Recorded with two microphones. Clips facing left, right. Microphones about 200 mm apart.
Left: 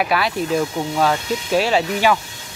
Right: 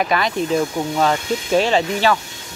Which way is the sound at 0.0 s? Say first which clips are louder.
Right 1 dB; 5° left (ahead or behind).